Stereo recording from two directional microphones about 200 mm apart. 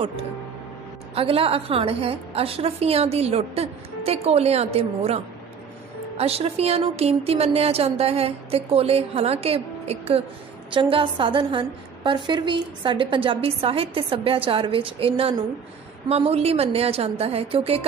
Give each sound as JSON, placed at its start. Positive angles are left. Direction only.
{"t": 1.1, "sound": "a woman's voice", "side_deg": -30}